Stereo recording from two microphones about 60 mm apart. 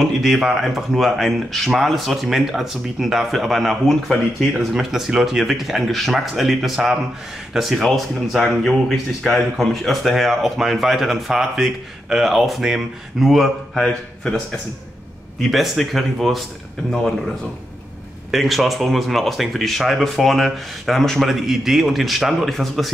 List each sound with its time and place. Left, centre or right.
0.0 s speech: centre
4.9 s a man's voice: centre
18.3 s speech: centre